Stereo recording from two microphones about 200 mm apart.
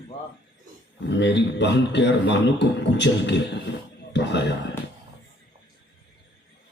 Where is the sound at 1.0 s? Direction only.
60° left (ahead or behind).